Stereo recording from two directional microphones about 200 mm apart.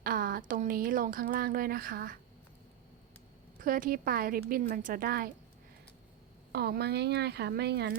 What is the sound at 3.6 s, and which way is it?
A woman's voice, 45° right (ahead or behind).